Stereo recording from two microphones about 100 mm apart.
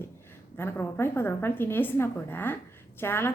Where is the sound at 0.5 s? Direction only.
20° left (ahead or behind).